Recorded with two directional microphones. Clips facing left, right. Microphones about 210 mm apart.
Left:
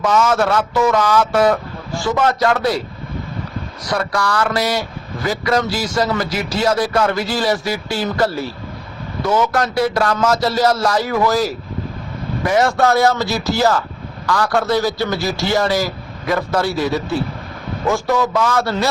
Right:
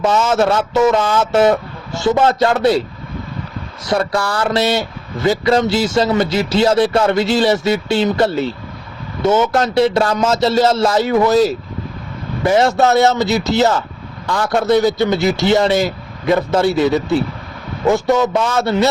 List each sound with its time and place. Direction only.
0.0 s speech: 25° right (ahead or behind)
3.8 s speech: 25° right (ahead or behind)